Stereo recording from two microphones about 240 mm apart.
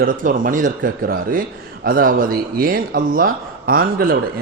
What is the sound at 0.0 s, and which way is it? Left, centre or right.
A man's voice, right.